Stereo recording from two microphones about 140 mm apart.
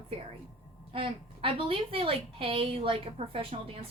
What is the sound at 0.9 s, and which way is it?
A woman's voice, 40° right (ahead or behind).